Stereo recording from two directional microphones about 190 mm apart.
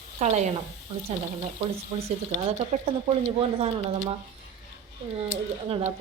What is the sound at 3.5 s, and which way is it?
Speech, 30° right (ahead or behind).